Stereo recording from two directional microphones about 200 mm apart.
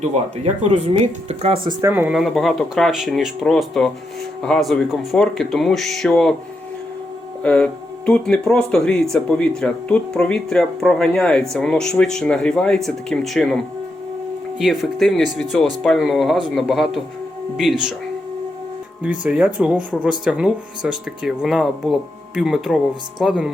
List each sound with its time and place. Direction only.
0.0 s speech: 30° right (ahead or behind)
1.8 s speech: 10° right (ahead or behind)
7.4 s speech: 5° left (ahead or behind)
14.6 s speech: centre (ahead or behind)
19.0 s speech: 5° right (ahead or behind)